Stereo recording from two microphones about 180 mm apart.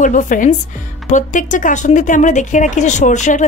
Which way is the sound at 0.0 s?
45° left (ahead or behind).